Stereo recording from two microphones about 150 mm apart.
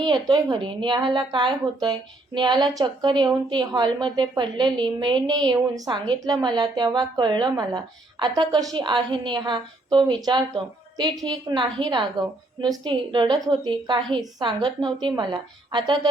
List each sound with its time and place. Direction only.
0.0 s a woman's voice: 30° right (ahead or behind)